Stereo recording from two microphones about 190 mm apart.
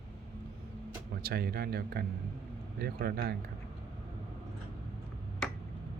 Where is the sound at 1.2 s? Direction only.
55° right (ahead or behind).